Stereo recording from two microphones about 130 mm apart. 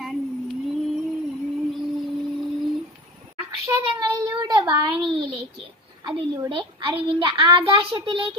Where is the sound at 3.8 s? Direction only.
35° right (ahead or behind).